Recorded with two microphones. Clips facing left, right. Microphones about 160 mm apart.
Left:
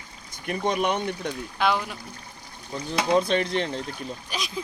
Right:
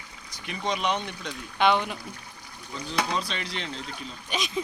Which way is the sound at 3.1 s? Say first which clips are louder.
Left 10 dB; 55° left (ahead or behind).